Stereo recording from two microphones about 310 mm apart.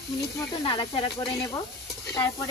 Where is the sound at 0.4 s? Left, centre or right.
Centre.